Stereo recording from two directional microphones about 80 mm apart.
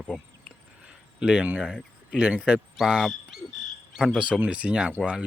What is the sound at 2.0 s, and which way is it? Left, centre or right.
Speech, centre.